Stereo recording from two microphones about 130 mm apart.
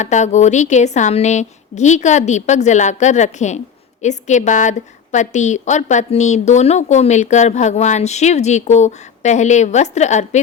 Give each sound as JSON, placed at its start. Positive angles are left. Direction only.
{"t": 0.0, "sound": "a woman's voice", "side_deg": 65}